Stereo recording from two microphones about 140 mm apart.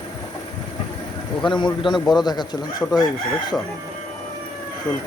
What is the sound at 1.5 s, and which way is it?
Chicken, 35° left (ahead or behind).